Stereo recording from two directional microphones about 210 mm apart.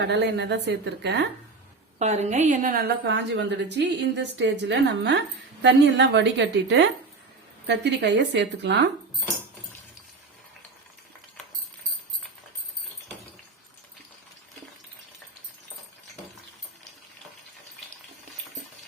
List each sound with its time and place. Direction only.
0.0 s a woman's voice: 55° right (ahead or behind)
2.0 s a woman's voice: 35° right (ahead or behind); by 8.9 s 55° right (ahead or behind)